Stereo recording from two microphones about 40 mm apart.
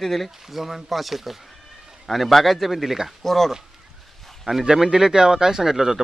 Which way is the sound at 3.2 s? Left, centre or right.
Centre.